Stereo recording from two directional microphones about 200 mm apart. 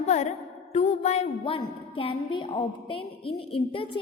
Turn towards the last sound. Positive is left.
turn(degrees=25)  # may be behind; listen again after turning